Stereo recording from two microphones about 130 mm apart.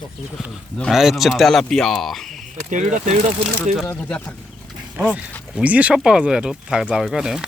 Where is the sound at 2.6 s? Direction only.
75° right (ahead or behind).